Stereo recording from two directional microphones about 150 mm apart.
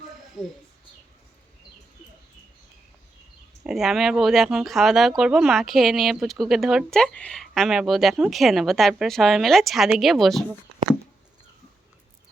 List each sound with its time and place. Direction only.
0.4 s speech: 5° left (ahead or behind)
3.6 s speech: 5° right (ahead or behind)